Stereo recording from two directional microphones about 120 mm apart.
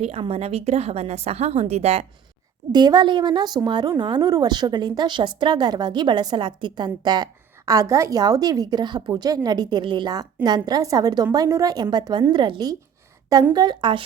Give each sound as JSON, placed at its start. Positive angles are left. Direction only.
{"t": 0.0, "sound": "a woman's voice", "side_deg": -55}
{"t": 2.7, "sound": "a woman's voice", "side_deg": -35}